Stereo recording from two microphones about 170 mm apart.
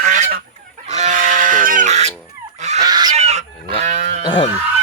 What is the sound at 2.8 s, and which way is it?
Goose, 25° right (ahead or behind).